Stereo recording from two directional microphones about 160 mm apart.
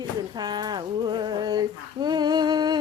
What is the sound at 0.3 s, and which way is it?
Female singing, 25° right (ahead or behind).